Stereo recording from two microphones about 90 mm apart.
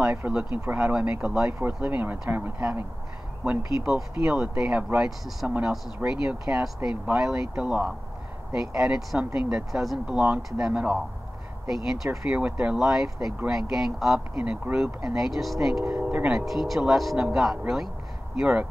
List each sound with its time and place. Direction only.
0.0 s speech: 20° right (ahead or behind); by 14.2 s centre (ahead or behind)
14.3 s speech: 15° right (ahead or behind)
15.1 s speech: centre (ahead or behind)
15.9 s speech: 15° right (ahead or behind)
16.3 s speech: centre (ahead or behind)